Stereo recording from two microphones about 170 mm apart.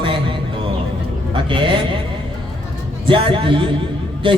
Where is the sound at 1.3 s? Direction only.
30° right (ahead or behind).